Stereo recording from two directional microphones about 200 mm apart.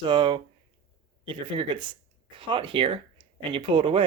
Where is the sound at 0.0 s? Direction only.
25° right (ahead or behind).